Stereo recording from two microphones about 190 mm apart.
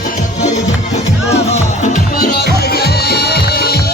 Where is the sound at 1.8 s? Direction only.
40° left (ahead or behind).